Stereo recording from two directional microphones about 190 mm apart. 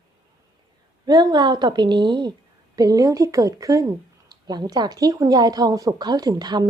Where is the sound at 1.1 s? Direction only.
20° right (ahead or behind).